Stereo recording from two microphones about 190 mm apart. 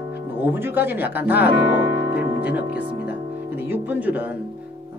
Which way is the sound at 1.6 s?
70° left (ahead or behind).